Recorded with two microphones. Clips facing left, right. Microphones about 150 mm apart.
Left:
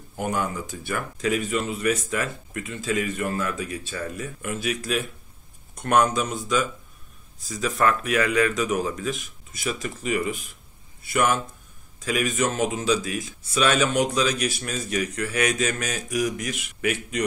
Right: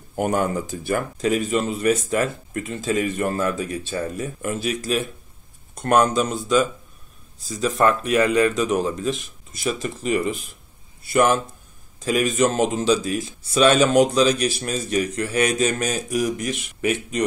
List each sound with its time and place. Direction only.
0.1 s speech: 50° right (ahead or behind); by 17.2 s 30° right (ahead or behind)